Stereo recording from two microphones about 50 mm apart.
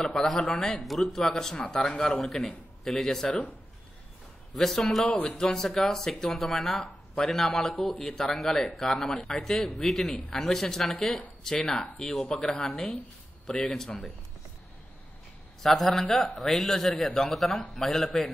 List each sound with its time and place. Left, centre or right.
0.0 s speech: centre
0.7 s speech: centre
4.6 s a man's voice: centre
5.1 s speech: left
5.4 s a man's voice: centre
13.8 s speech: centre
15.6 s a man's voice: centre